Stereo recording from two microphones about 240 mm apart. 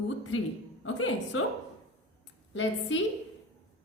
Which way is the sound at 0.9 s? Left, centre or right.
Left.